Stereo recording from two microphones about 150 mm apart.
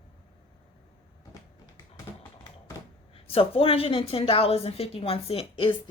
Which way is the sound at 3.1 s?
40° left (ahead or behind).